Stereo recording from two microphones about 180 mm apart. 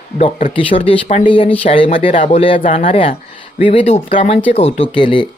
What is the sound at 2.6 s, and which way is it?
Speech, 45° left (ahead or behind).